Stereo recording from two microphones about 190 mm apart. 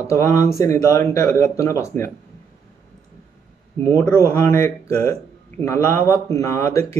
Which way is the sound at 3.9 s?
15° left (ahead or behind).